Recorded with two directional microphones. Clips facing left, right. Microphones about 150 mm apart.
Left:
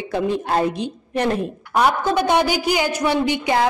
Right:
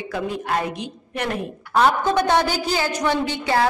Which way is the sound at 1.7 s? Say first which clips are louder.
Even; 10° left (ahead or behind).